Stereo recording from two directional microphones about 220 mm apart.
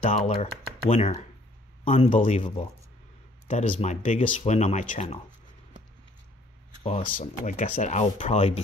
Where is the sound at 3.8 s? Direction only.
35° left (ahead or behind).